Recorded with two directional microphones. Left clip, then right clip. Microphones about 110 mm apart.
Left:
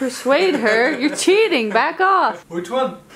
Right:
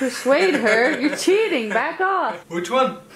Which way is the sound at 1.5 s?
55° left (ahead or behind).